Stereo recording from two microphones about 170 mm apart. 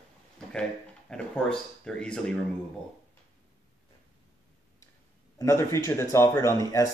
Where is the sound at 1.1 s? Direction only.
5° left (ahead or behind).